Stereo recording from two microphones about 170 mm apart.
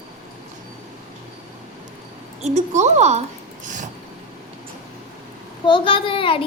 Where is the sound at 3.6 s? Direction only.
50° right (ahead or behind).